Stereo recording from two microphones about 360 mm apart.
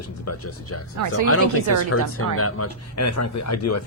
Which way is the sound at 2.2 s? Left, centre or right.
Left.